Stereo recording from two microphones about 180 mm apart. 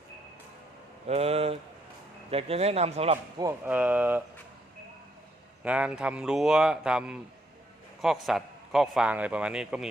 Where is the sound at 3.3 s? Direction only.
20° right (ahead or behind).